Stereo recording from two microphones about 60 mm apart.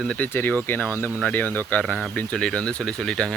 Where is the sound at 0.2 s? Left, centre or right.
Left.